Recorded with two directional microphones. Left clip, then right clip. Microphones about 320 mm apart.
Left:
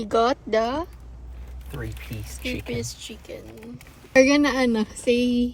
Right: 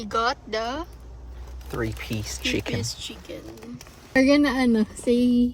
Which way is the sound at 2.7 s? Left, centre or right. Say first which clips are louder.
Even; centre.